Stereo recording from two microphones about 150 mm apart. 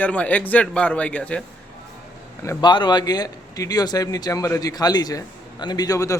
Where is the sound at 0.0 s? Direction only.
10° left (ahead or behind).